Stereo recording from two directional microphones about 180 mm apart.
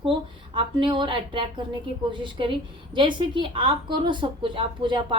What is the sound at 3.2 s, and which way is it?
A woman's voice, 25° right (ahead or behind).